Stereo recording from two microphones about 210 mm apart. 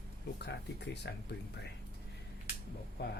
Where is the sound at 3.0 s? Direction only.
50° left (ahead or behind).